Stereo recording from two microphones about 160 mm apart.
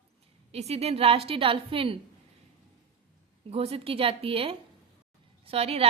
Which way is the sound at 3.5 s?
40° right (ahead or behind).